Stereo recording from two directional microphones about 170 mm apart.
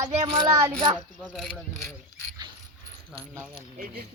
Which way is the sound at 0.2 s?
35° right (ahead or behind).